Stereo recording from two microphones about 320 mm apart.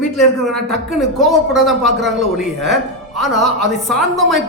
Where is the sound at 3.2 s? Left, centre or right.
Centre.